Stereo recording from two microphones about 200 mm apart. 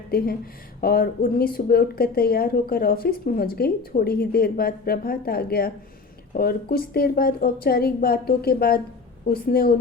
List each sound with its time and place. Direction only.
0.8 s a woman's voice: 50° left (ahead or behind)